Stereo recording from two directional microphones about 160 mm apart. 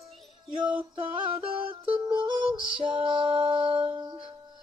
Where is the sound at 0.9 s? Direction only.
35° right (ahead or behind).